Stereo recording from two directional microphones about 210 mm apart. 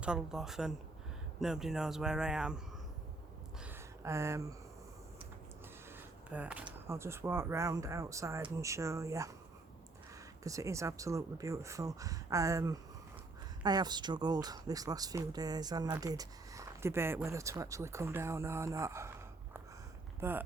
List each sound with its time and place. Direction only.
0.0 s speech: 5° right (ahead or behind)
3.6 s a sound: 10° right (ahead or behind)
6.3 s speech: 5° right (ahead or behind)
10.4 s speech: 15° right (ahead or behind)
20.1 s speech: 10° right (ahead or behind)